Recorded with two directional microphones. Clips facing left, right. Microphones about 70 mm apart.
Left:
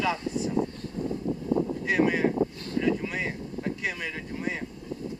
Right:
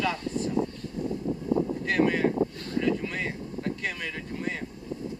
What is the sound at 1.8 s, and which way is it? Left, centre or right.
Speech, centre.